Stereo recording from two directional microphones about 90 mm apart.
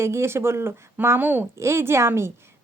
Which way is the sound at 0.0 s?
30° right (ahead or behind).